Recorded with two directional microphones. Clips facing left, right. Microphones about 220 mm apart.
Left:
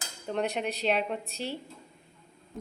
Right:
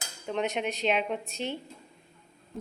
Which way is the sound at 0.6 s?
Centre (ahead or behind).